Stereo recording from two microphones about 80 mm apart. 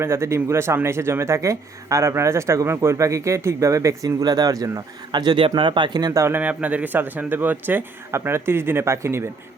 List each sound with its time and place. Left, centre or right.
0.0 s speech: right
5.1 s speech: right
6.1 s speech: right
6.4 s speech: centre; by 9.2 s right